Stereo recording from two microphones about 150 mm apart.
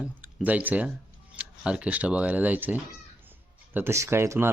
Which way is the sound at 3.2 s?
15° right (ahead or behind).